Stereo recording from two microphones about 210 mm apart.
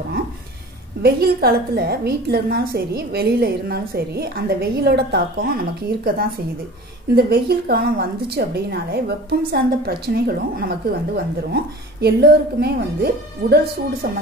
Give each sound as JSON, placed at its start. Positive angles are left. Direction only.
{"t": 1.0, "sound": "a woman's voice", "side_deg": -45}